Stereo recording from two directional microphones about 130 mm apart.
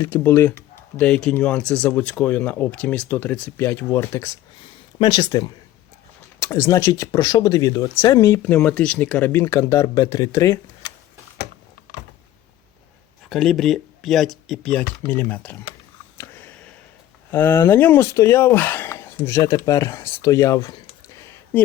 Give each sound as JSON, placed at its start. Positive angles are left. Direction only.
{"t": 0.0, "sound": "speech", "side_deg": 15}
{"t": 4.9, "sound": "speech", "side_deg": 30}
{"t": 13.3, "sound": "speech", "side_deg": 0}
{"t": 16.1, "sound": "a sound", "side_deg": 20}
{"t": 17.3, "sound": "speech", "side_deg": 20}